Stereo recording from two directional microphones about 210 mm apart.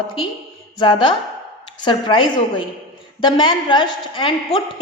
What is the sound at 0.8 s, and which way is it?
A woman's voice, 20° left (ahead or behind).